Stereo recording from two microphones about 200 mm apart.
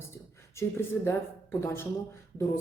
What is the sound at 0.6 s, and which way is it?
Speech, 15° left (ahead or behind).